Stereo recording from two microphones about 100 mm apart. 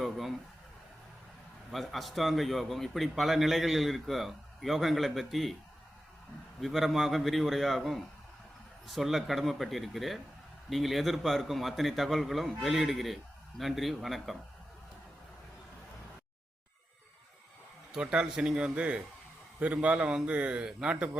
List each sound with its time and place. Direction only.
0.0 s speech: centre (ahead or behind)
1.7 s a man's voice: centre (ahead or behind)
6.6 s a man's voice: centre (ahead or behind)
17.9 s a man's voice: 10° right (ahead or behind)